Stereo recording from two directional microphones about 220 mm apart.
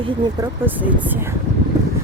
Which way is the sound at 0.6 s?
10° right (ahead or behind).